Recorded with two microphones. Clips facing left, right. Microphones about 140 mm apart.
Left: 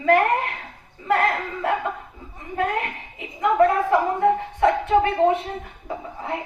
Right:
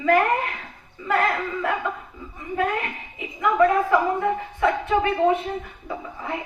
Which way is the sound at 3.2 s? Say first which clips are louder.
Left 1 dB; 50° left (ahead or behind).